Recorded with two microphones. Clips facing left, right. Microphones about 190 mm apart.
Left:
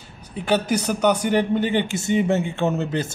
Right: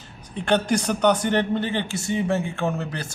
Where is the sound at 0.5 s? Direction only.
5° left (ahead or behind).